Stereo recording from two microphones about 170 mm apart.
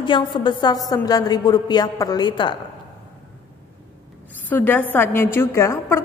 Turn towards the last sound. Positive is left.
turn(degrees=15)  # may be behind; listen again after turning